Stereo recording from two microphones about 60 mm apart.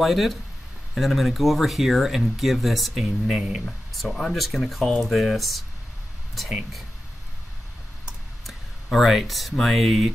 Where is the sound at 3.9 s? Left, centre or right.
Centre.